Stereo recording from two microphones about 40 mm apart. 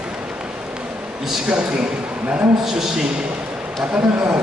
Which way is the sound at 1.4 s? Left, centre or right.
Right.